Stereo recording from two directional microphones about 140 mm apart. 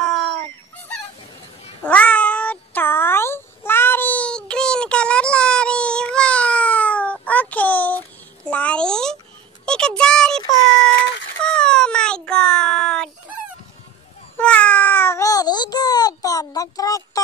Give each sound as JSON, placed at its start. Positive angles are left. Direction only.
{"t": 0.0, "sound": "fowl", "side_deg": 0}
{"t": 1.8, "sound": "meow", "side_deg": 10}
{"t": 8.5, "sound": "a sound", "side_deg": 10}
{"t": 14.4, "sound": "meow", "side_deg": 10}